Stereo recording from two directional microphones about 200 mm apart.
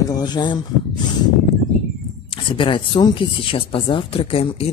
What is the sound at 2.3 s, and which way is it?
Speech, 25° left (ahead or behind).